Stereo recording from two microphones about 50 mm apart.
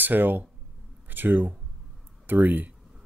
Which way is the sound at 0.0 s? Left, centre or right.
Right.